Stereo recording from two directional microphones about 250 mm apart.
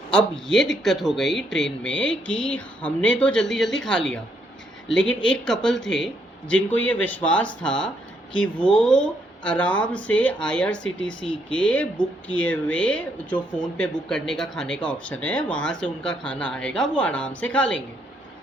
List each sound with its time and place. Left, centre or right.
0.1 s speech: centre